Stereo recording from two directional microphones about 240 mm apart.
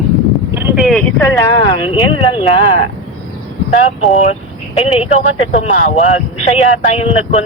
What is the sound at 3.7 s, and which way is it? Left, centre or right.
Speech, left.